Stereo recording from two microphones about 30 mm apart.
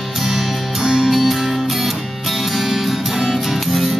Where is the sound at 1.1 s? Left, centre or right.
Centre.